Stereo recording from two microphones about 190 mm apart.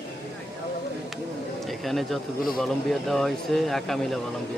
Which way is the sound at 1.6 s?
Centre (ahead or behind).